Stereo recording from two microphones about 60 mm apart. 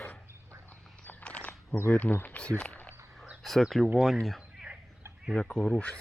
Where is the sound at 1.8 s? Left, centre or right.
Left.